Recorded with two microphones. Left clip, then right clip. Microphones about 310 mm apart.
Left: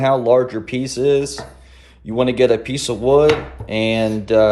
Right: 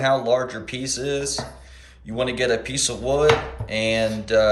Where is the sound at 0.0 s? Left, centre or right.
Centre.